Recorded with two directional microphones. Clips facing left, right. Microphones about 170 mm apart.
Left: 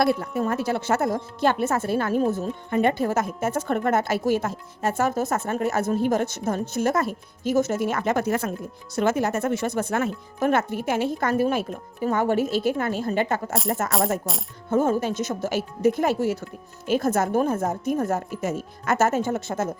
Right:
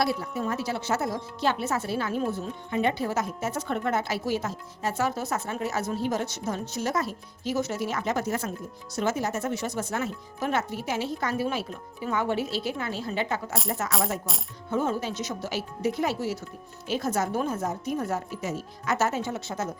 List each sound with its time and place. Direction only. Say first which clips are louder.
0.0 s a woman's voice: left 5 dB; 55° left (ahead or behind)
14.3 s coin: left 5 dB; centre (ahead or behind)
14.7 s a woman's voice: left 6 dB; 50° left (ahead or behind)